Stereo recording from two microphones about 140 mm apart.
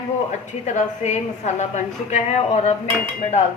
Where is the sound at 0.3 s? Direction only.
55° left (ahead or behind).